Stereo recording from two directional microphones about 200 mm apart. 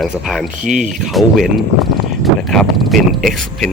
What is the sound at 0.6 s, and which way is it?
Speech, 40° right (ahead or behind).